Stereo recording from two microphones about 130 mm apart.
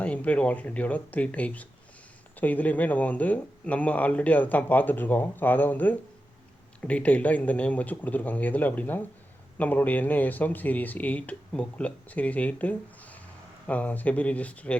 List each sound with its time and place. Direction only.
0.0 s speech: 10° left (ahead or behind)